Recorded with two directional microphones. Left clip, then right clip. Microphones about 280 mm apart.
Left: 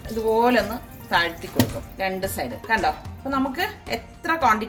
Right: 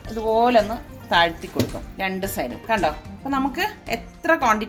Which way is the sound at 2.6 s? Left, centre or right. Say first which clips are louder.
Even; right.